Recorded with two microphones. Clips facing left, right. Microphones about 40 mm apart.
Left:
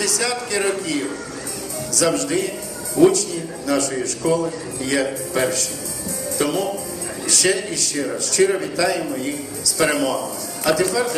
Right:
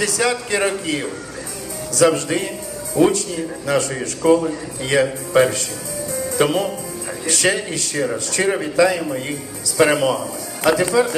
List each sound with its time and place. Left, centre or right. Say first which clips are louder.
0.0 s a man's voice: right 3 dB; right